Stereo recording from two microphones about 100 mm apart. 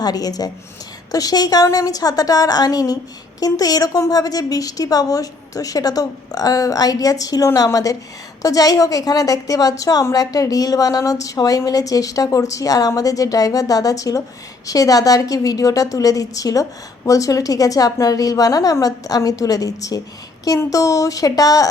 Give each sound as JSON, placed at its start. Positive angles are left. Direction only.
{"t": 0.0, "sound": "a woman's voice", "side_deg": 40}